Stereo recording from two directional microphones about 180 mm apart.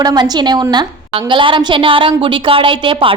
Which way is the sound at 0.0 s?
20° right (ahead or behind).